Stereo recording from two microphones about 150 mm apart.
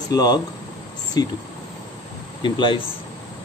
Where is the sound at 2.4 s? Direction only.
35° left (ahead or behind).